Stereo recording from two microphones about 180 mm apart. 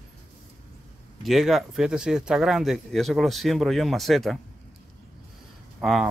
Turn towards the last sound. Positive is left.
turn(degrees=0)  # may be behind; listen again after turning